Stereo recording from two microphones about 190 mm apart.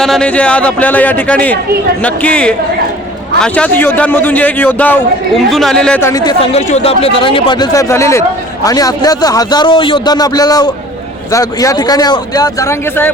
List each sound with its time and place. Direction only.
0.0 s a man's voice: 5° left (ahead or behind)
6.4 s a man's voice: 35° left (ahead or behind); by 13.1 s 15° left (ahead or behind)